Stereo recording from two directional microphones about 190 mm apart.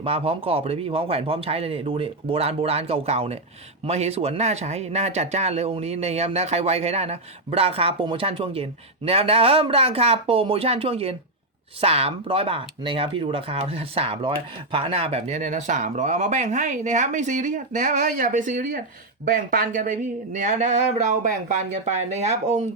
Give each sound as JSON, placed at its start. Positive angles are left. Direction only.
{"t": 0.0, "sound": "speech", "side_deg": -30}